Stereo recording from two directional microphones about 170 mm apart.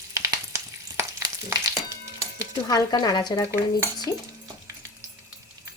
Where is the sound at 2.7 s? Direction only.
25° left (ahead or behind).